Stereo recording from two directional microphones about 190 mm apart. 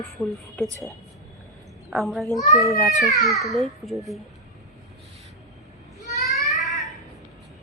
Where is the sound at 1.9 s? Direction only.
Centre (ahead or behind).